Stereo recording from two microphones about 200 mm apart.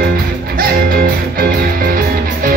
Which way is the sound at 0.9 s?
50° right (ahead or behind).